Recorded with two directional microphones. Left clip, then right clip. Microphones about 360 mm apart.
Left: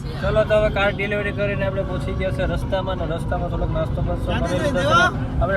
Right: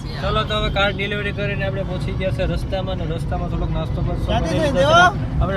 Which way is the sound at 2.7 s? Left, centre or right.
Centre.